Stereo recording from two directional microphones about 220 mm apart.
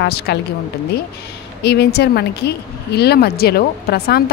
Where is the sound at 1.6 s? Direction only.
50° left (ahead or behind).